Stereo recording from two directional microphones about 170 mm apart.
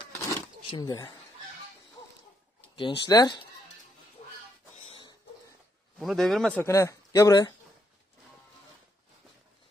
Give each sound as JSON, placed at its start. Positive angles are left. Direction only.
{"t": 0.7, "sound": "speech", "side_deg": 30}
{"t": 2.7, "sound": "speech", "side_deg": 30}
{"t": 5.9, "sound": "speech", "side_deg": 0}
{"t": 6.6, "sound": "speech", "side_deg": 20}